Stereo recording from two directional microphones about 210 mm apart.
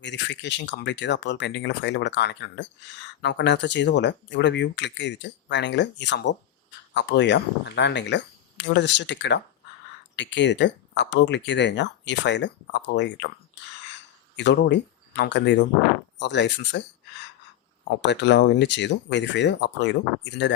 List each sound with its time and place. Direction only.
0.0 s speech: 55° left (ahead or behind)
14.3 s speech: 55° left (ahead or behind)
18.0 s speech: 55° left (ahead or behind)